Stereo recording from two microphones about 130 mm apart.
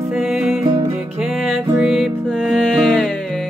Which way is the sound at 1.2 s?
5° right (ahead or behind).